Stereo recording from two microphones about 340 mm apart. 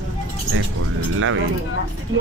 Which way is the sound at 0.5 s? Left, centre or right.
Right.